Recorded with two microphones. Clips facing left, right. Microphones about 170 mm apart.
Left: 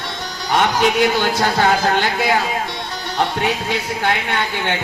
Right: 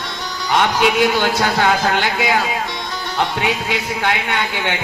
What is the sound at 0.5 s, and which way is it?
Speech, 40° left (ahead or behind).